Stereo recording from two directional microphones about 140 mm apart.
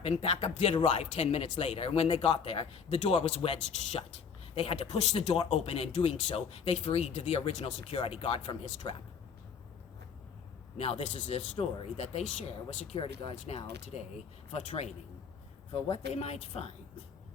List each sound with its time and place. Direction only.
0.0 s speech: 45° left (ahead or behind)
10.8 s speech: 45° left (ahead or behind)